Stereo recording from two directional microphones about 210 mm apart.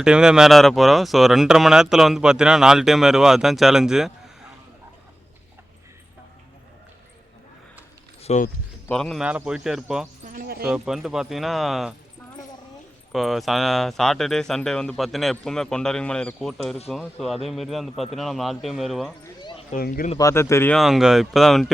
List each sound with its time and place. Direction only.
0.0 s speech: 5° right (ahead or behind)
8.2 s speech: 30° left (ahead or behind)
8.9 s speech: centre (ahead or behind)
10.2 s a sound: 45° right (ahead or behind)
10.6 s speech: 5° right (ahead or behind)
13.1 s speech: centre (ahead or behind)
19.2 s a sound: 20° left (ahead or behind)
19.7 s speech: 40° left (ahead or behind)
20.1 s speech: 15° left (ahead or behind)